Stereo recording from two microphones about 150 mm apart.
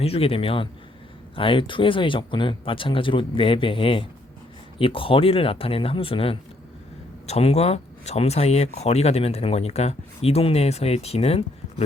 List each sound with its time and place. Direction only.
0.0 s speech: 40° left (ahead or behind)